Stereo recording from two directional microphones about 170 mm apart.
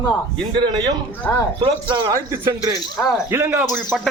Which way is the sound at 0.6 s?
20° right (ahead or behind).